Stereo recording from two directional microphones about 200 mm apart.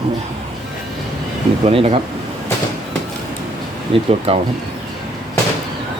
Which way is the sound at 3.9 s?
30° right (ahead or behind).